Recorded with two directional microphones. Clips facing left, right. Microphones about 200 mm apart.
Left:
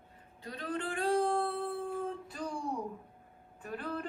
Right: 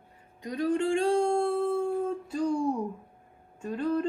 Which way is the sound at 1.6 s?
90° right.